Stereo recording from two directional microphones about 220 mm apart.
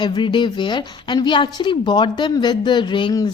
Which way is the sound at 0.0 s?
20° left (ahead or behind).